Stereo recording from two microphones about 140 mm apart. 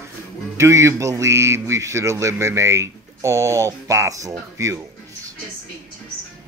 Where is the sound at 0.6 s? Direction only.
20° right (ahead or behind).